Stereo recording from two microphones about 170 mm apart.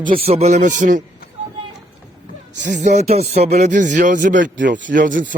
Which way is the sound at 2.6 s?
90° right.